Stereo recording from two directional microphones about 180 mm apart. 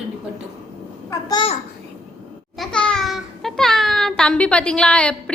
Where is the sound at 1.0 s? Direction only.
25° left (ahead or behind).